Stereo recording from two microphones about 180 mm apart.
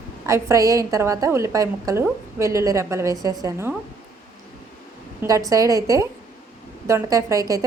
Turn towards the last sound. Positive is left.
turn(degrees=-20)  # may be behind; listen again after turning